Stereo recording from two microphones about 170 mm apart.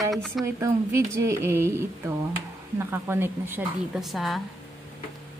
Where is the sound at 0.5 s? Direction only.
15° right (ahead or behind).